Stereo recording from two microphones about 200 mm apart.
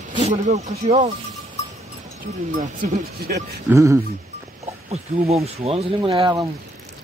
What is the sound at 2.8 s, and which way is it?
Speech, 50° right (ahead or behind).